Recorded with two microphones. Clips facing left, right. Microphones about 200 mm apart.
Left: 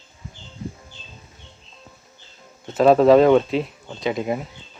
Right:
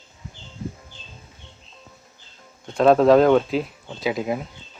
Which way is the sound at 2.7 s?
Centre (ahead or behind).